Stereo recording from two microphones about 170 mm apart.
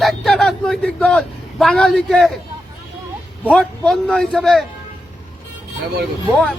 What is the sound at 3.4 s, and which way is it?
A man's voice, 5° left (ahead or behind).